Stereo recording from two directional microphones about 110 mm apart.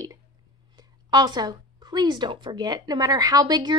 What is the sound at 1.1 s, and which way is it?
A woman's voice, 40° right (ahead or behind).